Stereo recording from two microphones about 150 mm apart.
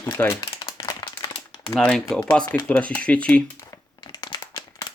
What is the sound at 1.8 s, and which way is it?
Speech, 5° left (ahead or behind).